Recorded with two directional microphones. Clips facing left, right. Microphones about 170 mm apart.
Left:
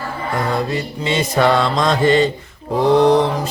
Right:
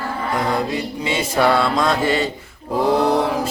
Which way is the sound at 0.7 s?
10° right (ahead or behind).